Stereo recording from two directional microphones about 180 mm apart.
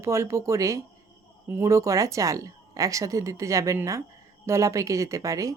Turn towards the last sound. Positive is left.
turn(degrees=-20)  # may be behind; listen again after turning